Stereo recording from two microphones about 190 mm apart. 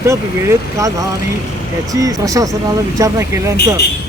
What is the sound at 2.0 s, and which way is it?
Speech, 20° right (ahead or behind).